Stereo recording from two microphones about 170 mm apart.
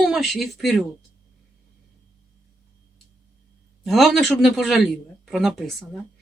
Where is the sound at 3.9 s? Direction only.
Centre (ahead or behind).